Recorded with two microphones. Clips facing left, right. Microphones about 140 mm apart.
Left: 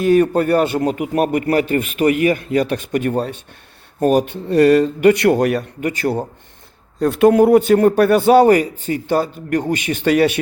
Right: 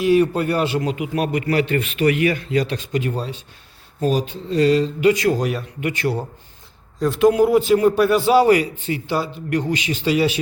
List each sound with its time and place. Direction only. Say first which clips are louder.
0.0 s a man's voice: left 3 dB; 50° left (ahead or behind)
5.8 s speech: even; 40° left (ahead or behind)
7.0 s a man's voice: left 3 dB; 60° left (ahead or behind)